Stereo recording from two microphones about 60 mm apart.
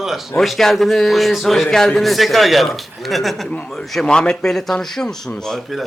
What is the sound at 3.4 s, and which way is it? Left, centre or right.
Speech, centre.